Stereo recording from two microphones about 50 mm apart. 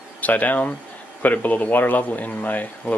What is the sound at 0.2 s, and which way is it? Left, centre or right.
Speech, left.